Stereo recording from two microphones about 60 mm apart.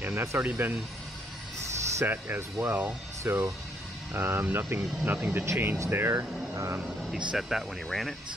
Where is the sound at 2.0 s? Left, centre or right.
Right.